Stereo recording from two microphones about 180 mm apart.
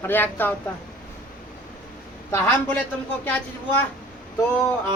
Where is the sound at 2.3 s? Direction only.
10° left (ahead or behind).